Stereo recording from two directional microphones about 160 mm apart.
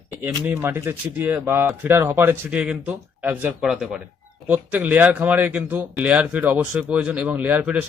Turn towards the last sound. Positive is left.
turn(degrees=-10)  # may be behind; listen again after turning